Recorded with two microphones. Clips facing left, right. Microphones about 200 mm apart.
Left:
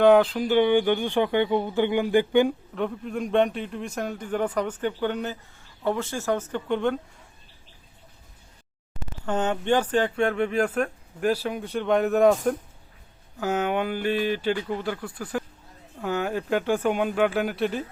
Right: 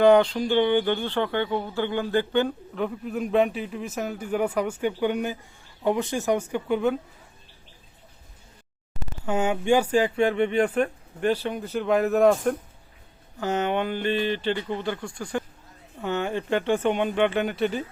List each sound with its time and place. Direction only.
0.0 s speech: centre (ahead or behind)
2.7 s speech: centre (ahead or behind)
9.2 s speech: 10° right (ahead or behind)